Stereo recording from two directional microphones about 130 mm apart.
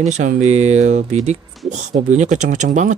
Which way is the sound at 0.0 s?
65° right (ahead or behind).